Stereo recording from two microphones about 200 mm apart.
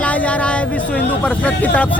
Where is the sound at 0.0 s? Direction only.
5° left (ahead or behind).